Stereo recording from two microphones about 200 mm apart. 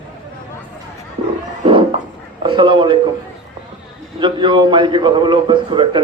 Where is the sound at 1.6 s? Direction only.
25° right (ahead or behind).